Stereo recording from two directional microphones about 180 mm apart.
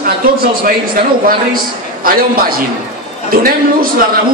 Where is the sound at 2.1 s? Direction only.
55° right (ahead or behind).